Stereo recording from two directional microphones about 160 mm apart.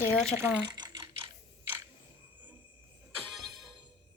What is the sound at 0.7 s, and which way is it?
Ratchet, 25° right (ahead or behind).